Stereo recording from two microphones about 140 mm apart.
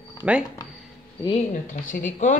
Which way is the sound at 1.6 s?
70° left (ahead or behind).